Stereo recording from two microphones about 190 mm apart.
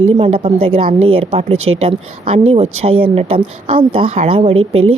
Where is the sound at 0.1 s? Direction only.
30° right (ahead or behind).